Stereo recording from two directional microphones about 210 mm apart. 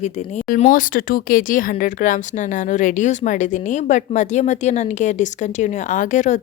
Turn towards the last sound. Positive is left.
turn(degrees=35)  # may be behind; listen again after turning